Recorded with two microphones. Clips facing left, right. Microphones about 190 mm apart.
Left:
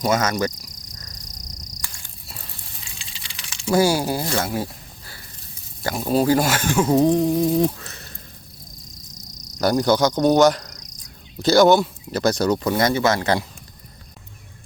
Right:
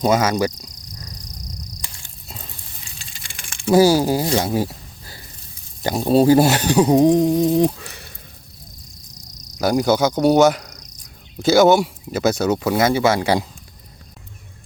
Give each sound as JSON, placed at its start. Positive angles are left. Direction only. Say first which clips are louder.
{"t": 0.1, "sound": "speech", "louder": "right 2 dB", "side_deg": -10}
{"t": 1.8, "sound": "insect", "louder": "right 1 dB", "side_deg": -20}
{"t": 3.0, "sound": "a sound", "louder": "right 1 dB", "side_deg": -50}
{"t": 4.0, "sound": "speech", "louder": "right 5 dB", "side_deg": -15}
{"t": 5.8, "sound": "speech", "louder": "right 5 dB", "side_deg": -25}
{"t": 9.6, "sound": "speech", "louder": "right 1 dB", "side_deg": -10}